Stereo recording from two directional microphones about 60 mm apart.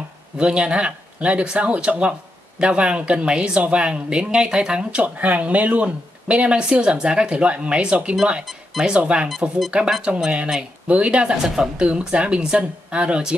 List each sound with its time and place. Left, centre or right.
0.4 s speech: centre
11.4 s a woman's voice: centre
11.8 s speech: centre